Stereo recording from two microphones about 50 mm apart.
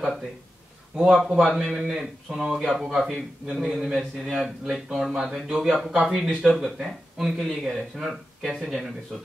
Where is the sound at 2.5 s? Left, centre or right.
Centre.